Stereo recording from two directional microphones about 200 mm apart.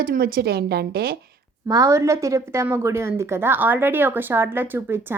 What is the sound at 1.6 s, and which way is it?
A woman's voice, 15° right (ahead or behind).